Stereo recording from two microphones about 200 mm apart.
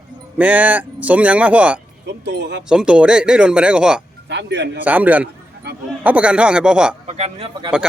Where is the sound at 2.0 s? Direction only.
60° right (ahead or behind).